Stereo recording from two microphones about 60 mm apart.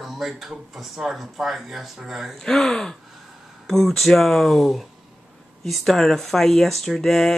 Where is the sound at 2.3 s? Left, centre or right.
Centre.